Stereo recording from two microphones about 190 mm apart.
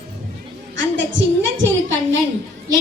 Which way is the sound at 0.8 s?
75° right (ahead or behind).